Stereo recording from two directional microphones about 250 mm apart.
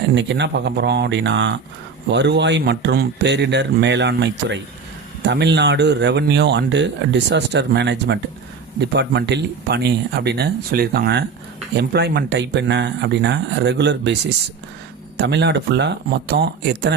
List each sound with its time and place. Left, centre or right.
0.1 s speech: right